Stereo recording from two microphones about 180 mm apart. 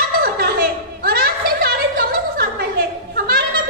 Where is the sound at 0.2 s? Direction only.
55° right (ahead or behind).